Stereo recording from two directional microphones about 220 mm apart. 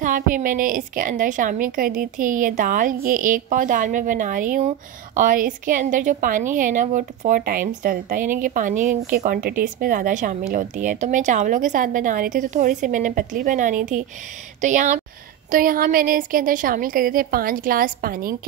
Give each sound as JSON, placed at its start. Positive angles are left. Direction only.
{"t": 0.0, "sound": "a woman's voice", "side_deg": -35}